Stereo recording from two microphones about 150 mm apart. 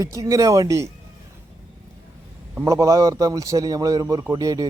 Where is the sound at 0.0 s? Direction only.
20° right (ahead or behind).